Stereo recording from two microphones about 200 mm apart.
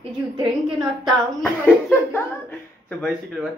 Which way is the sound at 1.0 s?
5° left (ahead or behind).